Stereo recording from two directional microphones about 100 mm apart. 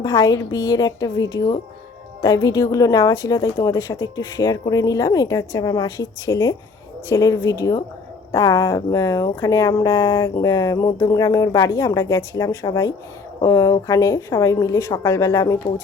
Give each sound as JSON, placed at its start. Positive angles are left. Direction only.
{"t": 0.0, "sound": "a woman's voice", "side_deg": 40}